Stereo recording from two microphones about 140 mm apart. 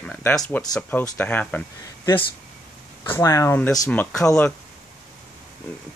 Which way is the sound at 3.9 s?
10° left (ahead or behind).